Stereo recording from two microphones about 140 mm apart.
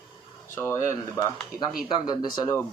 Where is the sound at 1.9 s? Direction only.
30° left (ahead or behind).